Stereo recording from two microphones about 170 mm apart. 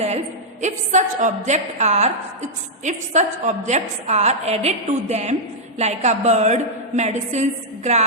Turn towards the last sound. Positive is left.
turn(degrees=-40)  # may be behind; listen again after turning